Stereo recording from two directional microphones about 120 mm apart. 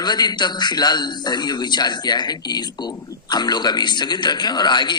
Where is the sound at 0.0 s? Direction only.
35° left (ahead or behind).